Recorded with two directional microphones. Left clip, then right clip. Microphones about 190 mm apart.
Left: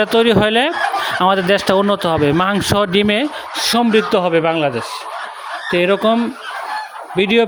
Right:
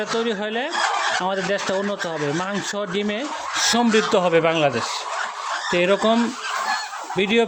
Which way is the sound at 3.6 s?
25° left (ahead or behind).